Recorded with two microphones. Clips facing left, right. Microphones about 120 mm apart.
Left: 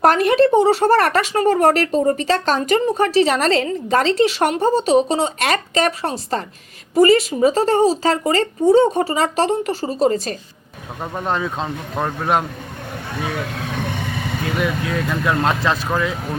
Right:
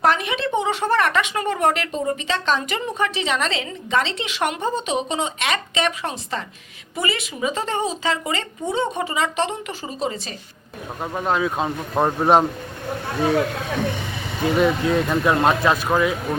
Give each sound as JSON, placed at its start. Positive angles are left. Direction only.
{"t": 0.0, "sound": "speech", "side_deg": 45}
{"t": 11.0, "sound": "speech", "side_deg": 0}
{"t": 14.4, "sound": "speech", "side_deg": -25}
{"t": 15.4, "sound": "speech", "side_deg": -15}